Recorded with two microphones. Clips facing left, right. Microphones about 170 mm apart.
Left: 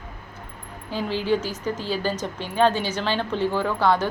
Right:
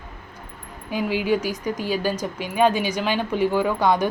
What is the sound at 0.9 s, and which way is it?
A woman's voice, 10° right (ahead or behind).